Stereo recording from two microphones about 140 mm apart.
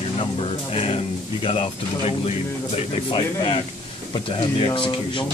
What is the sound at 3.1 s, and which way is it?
Speech, 35° left (ahead or behind).